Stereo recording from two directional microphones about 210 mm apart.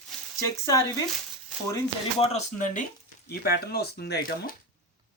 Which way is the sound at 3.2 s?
50° left (ahead or behind).